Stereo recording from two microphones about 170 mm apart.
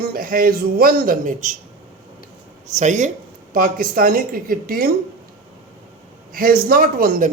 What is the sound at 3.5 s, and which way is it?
Speech, 55° right (ahead or behind).